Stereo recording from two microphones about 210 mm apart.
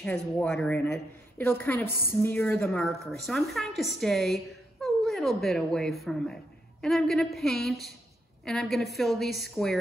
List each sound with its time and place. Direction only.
0.0 s a woman's voice: 5° left (ahead or behind)